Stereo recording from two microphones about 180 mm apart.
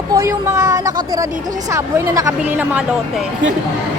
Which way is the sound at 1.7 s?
15° right (ahead or behind).